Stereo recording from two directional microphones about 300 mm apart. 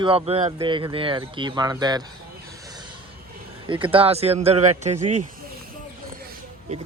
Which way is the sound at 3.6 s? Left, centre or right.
Centre.